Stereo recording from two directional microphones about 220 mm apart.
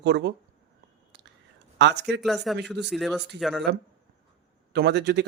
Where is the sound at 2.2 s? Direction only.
Centre (ahead or behind).